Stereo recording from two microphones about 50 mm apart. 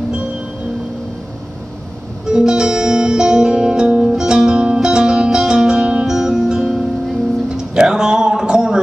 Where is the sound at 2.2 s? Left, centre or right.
Centre.